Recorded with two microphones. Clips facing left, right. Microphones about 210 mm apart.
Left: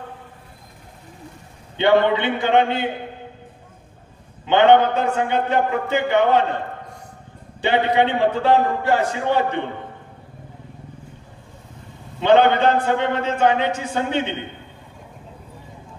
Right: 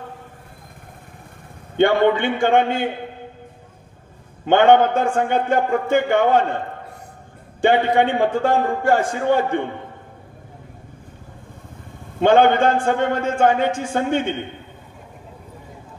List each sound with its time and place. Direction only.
1.8 s a man's voice: 50° right (ahead or behind)
4.5 s a man's voice: 50° right (ahead or behind)
7.6 s a man's voice: 50° right (ahead or behind)
12.2 s a man's voice: 50° right (ahead or behind)